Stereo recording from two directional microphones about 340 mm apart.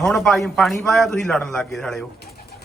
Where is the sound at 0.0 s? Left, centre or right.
Centre.